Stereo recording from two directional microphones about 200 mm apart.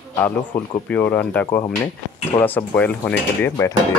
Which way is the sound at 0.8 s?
10° left (ahead or behind).